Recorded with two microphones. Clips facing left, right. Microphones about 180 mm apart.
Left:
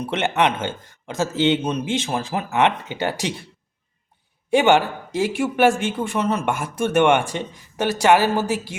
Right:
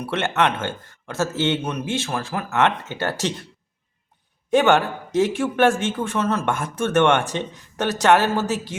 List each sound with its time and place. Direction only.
0.0 s speech: 20° left (ahead or behind)
4.5 s speech: 10° left (ahead or behind)